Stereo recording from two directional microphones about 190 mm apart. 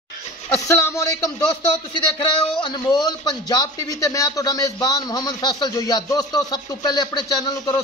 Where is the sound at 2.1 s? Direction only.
25° left (ahead or behind).